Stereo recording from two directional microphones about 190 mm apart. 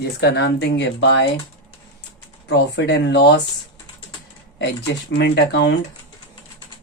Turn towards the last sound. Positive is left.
turn(degrees=65)  # may be behind; listen again after turning